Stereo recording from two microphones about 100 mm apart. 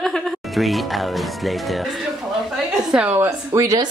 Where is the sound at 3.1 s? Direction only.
30° right (ahead or behind).